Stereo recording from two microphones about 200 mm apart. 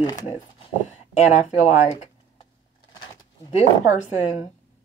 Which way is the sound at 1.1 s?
35° left (ahead or behind).